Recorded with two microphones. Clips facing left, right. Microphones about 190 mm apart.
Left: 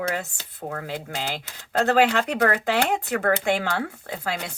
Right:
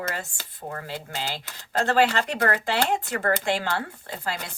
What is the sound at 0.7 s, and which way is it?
Speech, 55° left (ahead or behind).